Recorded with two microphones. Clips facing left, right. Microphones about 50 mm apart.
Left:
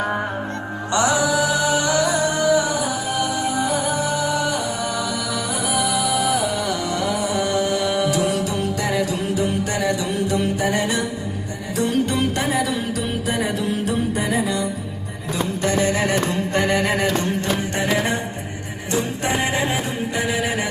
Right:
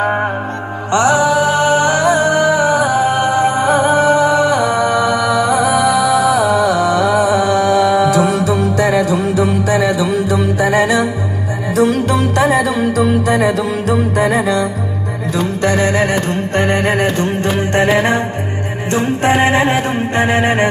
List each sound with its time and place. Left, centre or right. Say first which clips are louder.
0.0 s music: right 7 dB; right
15.6 s music: right 6 dB; right